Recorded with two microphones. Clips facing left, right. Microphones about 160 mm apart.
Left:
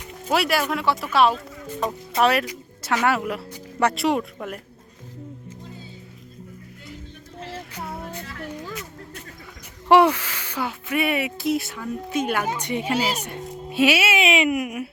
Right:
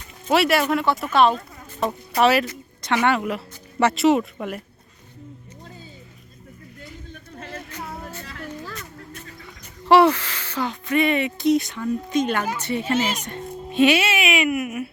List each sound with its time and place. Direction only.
0.3 s speech: centre (ahead or behind)
2.5 s a sound: 10° left (ahead or behind)
3.1 s speech: centre (ahead or behind)
7.7 s music: 10° left (ahead or behind)
8.4 s a sound: 10° left (ahead or behind)
9.9 s speech: 10° left (ahead or behind)
14.2 s speech: 25° left (ahead or behind)